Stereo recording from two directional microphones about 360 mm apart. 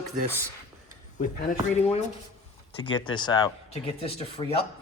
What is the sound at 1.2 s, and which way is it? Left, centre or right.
Speech, left.